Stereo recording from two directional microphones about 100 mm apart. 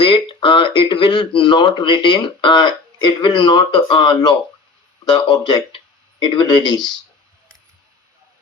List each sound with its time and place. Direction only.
0.0 s speech: 55° left (ahead or behind)